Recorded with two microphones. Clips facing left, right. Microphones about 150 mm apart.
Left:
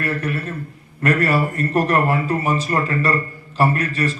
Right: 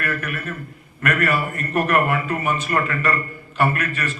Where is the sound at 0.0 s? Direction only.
30° left (ahead or behind).